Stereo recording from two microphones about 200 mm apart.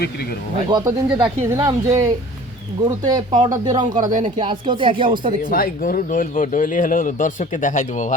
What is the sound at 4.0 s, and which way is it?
Speech, 40° right (ahead or behind).